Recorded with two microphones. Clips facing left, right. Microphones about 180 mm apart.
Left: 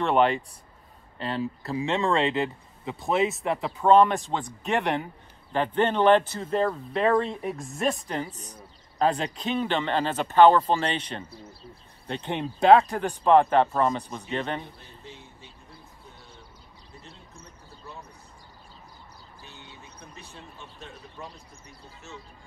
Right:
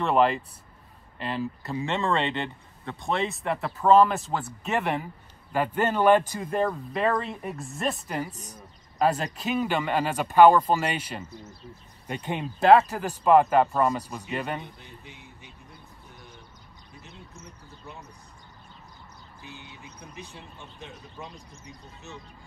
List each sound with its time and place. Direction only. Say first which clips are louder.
0.0 s speech: even; centre (ahead or behind)
6.7 s speech: left 3 dB; centre (ahead or behind)
11.2 s speech: right 1 dB; 30° left (ahead or behind)
12.1 s speech: left 1 dB; 10° right (ahead or behind)
19.4 s vehicle: right 4 dB; 15° right (ahead or behind)
20.3 s speech: even; 15° right (ahead or behind)